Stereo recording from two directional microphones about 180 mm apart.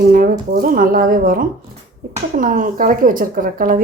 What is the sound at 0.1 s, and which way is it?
Speech, 55° right (ahead or behind).